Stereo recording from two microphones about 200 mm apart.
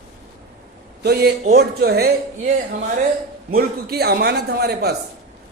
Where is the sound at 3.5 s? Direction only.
50° right (ahead or behind).